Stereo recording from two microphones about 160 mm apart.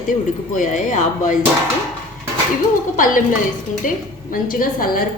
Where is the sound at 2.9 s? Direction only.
55° left (ahead or behind).